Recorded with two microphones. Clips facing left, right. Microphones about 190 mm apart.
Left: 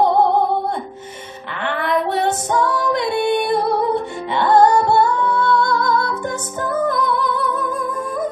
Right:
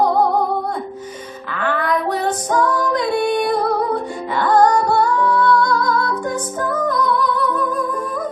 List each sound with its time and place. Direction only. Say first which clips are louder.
0.0 s music: left 1 dB; 25° left (ahead or behind)
1.6 s female singing: even; 25° left (ahead or behind)
6.9 s music: right 1 dB; 25° left (ahead or behind)